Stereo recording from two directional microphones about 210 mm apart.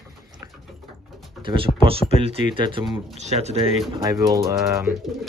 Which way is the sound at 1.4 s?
25° right (ahead or behind).